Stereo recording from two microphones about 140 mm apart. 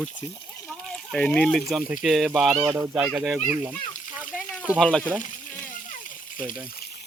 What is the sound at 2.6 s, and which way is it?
Speech, 25° right (ahead or behind).